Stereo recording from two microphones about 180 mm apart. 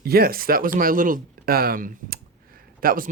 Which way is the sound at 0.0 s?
55° right (ahead or behind).